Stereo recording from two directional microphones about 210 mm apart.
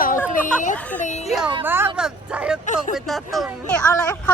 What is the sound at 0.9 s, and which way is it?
Speech, 35° left (ahead or behind).